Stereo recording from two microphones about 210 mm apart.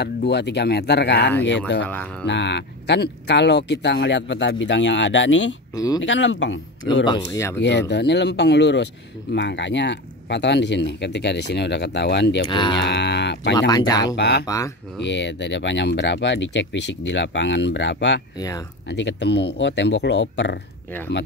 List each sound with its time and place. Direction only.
0.0 s speech: 55° left (ahead or behind)
7.2 s speech: 15° left (ahead or behind)
7.9 s speech: 55° left (ahead or behind)
12.4 s speech: 20° left (ahead or behind)
12.7 s speech: 55° left (ahead or behind)
13.6 s speech: 20° left (ahead or behind)
14.0 s speech: 55° left (ahead or behind)
14.4 s speech: 15° left (ahead or behind)
15.0 s speech: 60° left (ahead or behind)